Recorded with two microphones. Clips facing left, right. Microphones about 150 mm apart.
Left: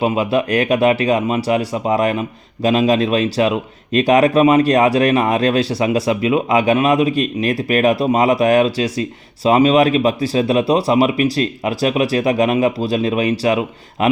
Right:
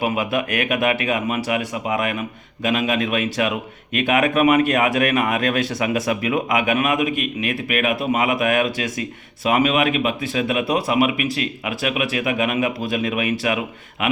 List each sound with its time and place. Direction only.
0.0 s speech: 30° left (ahead or behind)